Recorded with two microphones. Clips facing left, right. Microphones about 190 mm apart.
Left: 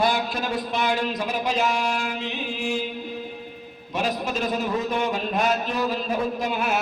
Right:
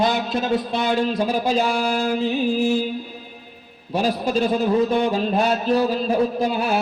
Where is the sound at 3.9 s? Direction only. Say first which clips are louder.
Right 5 dB; 30° right (ahead or behind).